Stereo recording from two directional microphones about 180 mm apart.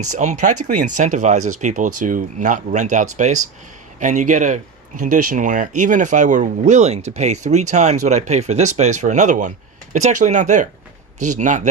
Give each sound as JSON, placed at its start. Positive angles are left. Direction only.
{"t": 0.0, "sound": "speech", "side_deg": -40}